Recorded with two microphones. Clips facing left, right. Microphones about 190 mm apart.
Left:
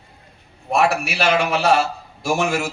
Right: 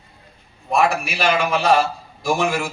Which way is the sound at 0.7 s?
70° left (ahead or behind).